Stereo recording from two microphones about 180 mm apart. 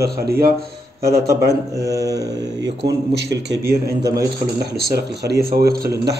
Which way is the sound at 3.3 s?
70° right (ahead or behind).